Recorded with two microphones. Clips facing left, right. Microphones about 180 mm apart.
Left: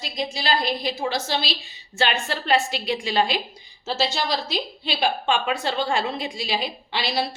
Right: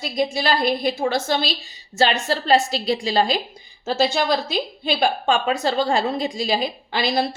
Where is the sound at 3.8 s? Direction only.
55° right (ahead or behind).